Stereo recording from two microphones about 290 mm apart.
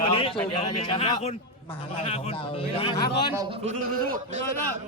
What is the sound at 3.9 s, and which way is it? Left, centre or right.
Speech, right.